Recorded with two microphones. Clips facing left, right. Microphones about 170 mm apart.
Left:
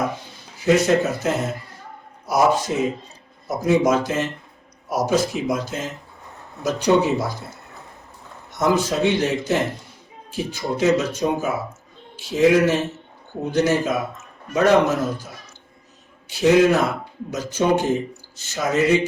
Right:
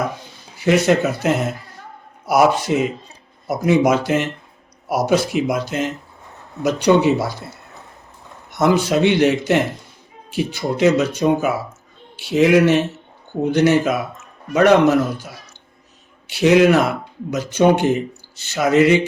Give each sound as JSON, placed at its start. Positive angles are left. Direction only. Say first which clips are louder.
{"t": 0.6, "sound": "speech", "louder": "right 2 dB", "side_deg": -70}
{"t": 8.5, "sound": "speech", "louder": "right 4 dB", "side_deg": -70}
{"t": 16.3, "sound": "speech", "louder": "right 3 dB", "side_deg": -70}